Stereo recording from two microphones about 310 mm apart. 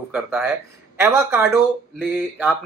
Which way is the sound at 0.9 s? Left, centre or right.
Centre.